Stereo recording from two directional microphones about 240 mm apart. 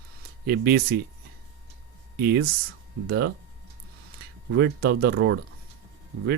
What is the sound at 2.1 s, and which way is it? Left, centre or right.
Speech, right.